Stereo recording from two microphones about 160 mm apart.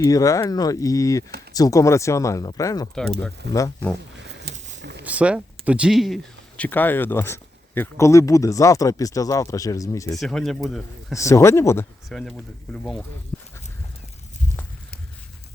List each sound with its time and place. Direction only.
0.0 s speech: 20° left (ahead or behind)
2.9 s speech: 5° left (ahead or behind)
4.5 s a sound: 90° right
5.0 s speech: 10° right (ahead or behind)
6.6 s speech: 10° left (ahead or behind)
10.2 s speech: centre (ahead or behind)
11.1 s speech: 20° left (ahead or behind)
12.0 s speech: 5° left (ahead or behind)